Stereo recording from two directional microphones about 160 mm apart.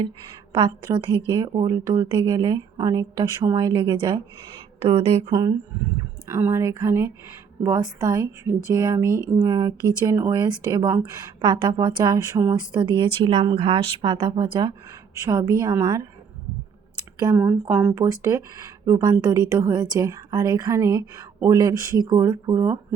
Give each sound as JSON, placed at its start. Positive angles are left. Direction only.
{"t": 0.5, "sound": "speech", "side_deg": -30}
{"t": 5.3, "sound": "speech", "side_deg": -25}
{"t": 17.2, "sound": "speech", "side_deg": -20}